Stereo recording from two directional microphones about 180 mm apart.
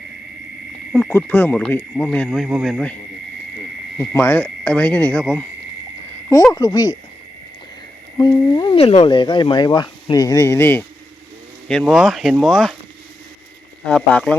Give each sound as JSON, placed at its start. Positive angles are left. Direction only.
{"t": 1.1, "sound": "speech", "side_deg": 10}
{"t": 4.1, "sound": "speech", "side_deg": 15}
{"t": 6.3, "sound": "speech", "side_deg": 20}
{"t": 8.2, "sound": "speech", "side_deg": 25}
{"t": 11.7, "sound": "speech", "side_deg": 0}
{"t": 13.8, "sound": "speech", "side_deg": 5}